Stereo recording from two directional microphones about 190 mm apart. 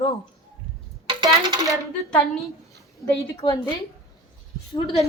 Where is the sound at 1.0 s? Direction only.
25° right (ahead or behind).